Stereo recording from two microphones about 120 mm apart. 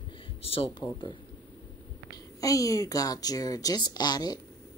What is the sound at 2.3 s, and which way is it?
Speech, 30° left (ahead or behind).